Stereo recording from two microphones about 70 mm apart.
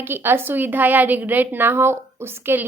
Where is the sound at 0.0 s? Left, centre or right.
Right.